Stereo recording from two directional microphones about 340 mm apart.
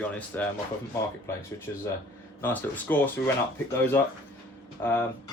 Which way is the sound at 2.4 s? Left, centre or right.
Centre.